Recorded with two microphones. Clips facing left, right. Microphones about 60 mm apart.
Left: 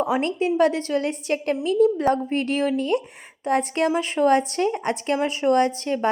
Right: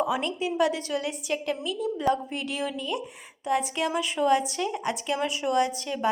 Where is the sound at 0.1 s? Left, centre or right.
Left.